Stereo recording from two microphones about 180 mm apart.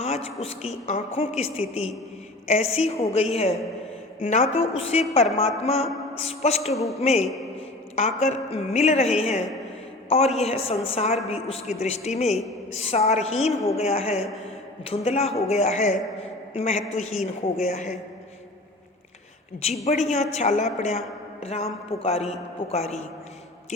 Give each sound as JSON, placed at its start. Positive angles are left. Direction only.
{"t": 0.0, "sound": "a woman's voice", "side_deg": 35}
{"t": 4.3, "sound": "a man's voice", "side_deg": 40}
{"t": 19.8, "sound": "a man's voice", "side_deg": 40}